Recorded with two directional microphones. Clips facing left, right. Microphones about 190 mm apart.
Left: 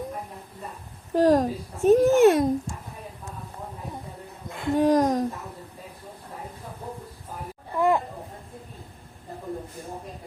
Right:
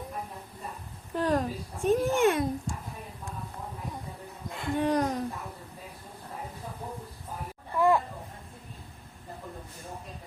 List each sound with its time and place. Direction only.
1.1 s speech: 40° left (ahead or behind)
4.8 s speech: 40° left (ahead or behind)
7.8 s a sound: 20° left (ahead or behind)